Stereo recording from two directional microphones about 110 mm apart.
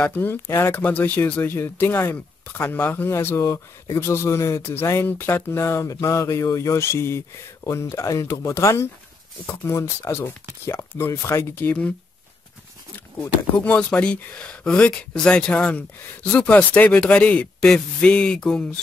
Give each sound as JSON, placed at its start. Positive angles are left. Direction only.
{"t": 0.0, "sound": "speech", "side_deg": 15}
{"t": 13.6, "sound": "speech", "side_deg": 10}